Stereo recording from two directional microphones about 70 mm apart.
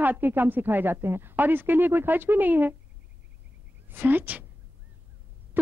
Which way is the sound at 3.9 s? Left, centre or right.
Right.